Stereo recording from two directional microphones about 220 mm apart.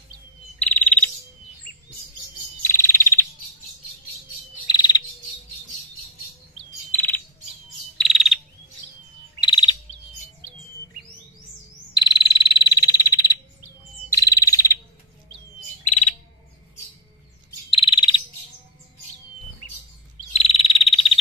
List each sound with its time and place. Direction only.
0.6 s bird: 5° left (ahead or behind)
2.6 s bird: 10° left (ahead or behind)
4.6 s frog: 20° left (ahead or behind)
6.9 s bird: 10° left (ahead or behind)
8.0 s frog: centre (ahead or behind)
9.4 s chirp: 20° left (ahead or behind)
11.9 s frog: 20° left (ahead or behind)
15.8 s bird: 35° left (ahead or behind)
17.6 s frog: 25° left (ahead or behind)
20.3 s frog: 25° left (ahead or behind)